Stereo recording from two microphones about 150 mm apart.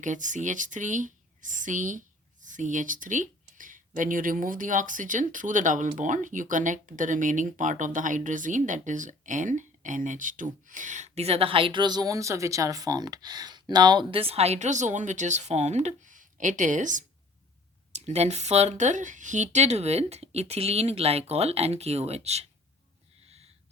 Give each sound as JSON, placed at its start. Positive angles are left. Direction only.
{"t": 0.0, "sound": "speech", "side_deg": -55}